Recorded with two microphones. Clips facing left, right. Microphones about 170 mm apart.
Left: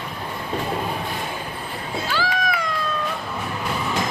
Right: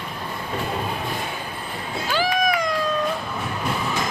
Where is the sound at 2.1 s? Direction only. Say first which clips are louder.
Right 4 dB; 15° right (ahead or behind).